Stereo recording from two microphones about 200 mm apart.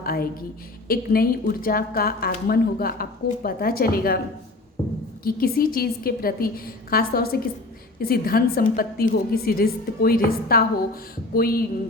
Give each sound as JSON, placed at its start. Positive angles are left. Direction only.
{"t": 0.0, "sound": "a woman's voice", "side_deg": 50}
{"t": 5.2, "sound": "a woman's voice", "side_deg": 45}